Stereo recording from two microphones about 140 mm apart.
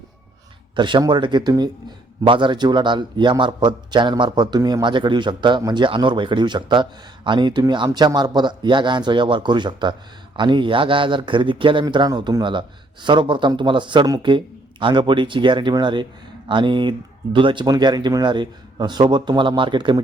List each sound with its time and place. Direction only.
0.8 s a man's voice: 35° right (ahead or behind)